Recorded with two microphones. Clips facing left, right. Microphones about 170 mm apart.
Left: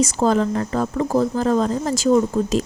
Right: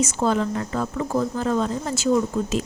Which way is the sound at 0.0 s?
35° left (ahead or behind).